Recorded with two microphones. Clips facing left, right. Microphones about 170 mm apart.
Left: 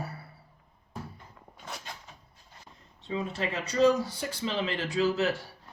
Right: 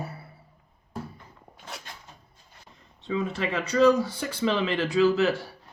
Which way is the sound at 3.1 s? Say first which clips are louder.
Right 4 dB; 65° right (ahead or behind).